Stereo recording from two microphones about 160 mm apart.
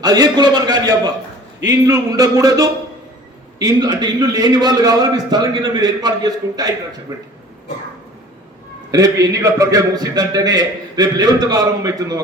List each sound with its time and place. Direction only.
0.0 s a man's voice: 25° right (ahead or behind)
8.9 s a man's voice: 20° right (ahead or behind)